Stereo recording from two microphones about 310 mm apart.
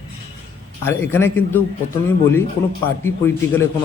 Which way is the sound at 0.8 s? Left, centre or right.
Centre.